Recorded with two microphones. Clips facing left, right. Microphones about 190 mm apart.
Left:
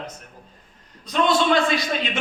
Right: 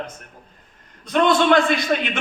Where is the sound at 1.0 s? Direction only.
55° right (ahead or behind).